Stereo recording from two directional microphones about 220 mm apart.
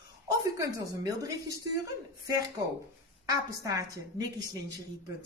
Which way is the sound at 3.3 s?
15° right (ahead or behind).